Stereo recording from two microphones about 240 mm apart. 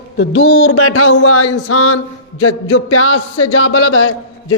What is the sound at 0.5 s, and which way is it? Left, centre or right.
A man's voice, left.